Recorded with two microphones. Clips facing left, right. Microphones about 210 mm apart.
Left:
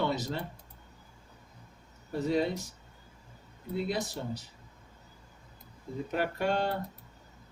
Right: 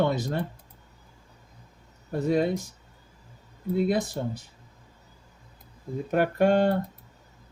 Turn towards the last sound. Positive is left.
turn(degrees=-50)  # may be behind; listen again after turning